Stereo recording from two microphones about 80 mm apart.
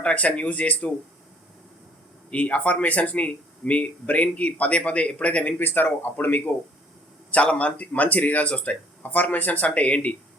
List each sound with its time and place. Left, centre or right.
0.0 s speech: centre
2.3 s speech: centre